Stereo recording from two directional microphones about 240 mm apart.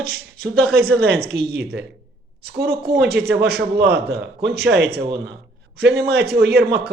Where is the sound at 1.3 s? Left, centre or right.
Right.